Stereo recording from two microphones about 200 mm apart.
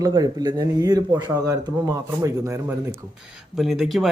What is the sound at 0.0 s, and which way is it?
Speech, 20° right (ahead or behind).